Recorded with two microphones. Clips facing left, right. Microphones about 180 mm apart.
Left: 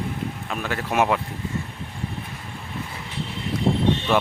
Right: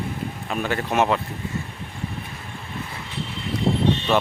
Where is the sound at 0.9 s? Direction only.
10° left (ahead or behind).